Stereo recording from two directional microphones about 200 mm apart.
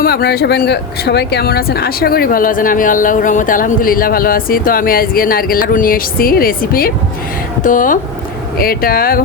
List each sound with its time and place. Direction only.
0.0 s speech: 50° left (ahead or behind)